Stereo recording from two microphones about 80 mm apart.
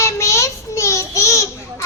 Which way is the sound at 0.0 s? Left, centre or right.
Left.